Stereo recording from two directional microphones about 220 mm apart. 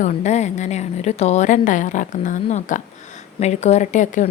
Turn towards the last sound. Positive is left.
turn(degrees=35)  # may be behind; listen again after turning